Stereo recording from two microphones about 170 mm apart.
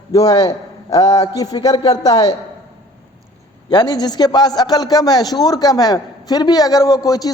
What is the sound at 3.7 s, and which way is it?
A man's voice, 25° left (ahead or behind).